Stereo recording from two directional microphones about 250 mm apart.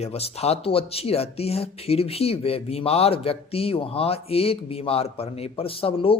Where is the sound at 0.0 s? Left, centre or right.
Left.